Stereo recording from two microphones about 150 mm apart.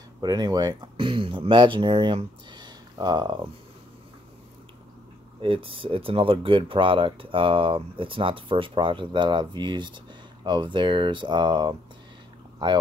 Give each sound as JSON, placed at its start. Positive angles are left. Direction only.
{"t": 0.2, "sound": "speech", "side_deg": -25}
{"t": 5.4, "sound": "speech", "side_deg": -35}